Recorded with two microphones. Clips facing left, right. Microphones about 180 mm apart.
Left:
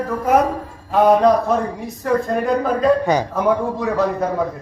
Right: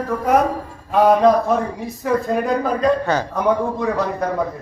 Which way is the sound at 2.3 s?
Centre (ahead or behind).